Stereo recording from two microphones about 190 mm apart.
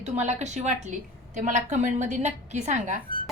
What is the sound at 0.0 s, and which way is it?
A woman's voice, 35° right (ahead or behind).